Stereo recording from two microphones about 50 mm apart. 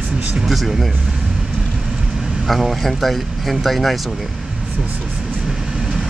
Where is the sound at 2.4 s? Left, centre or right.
Centre.